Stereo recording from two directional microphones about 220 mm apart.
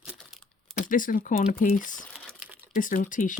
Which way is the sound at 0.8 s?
40° left (ahead or behind).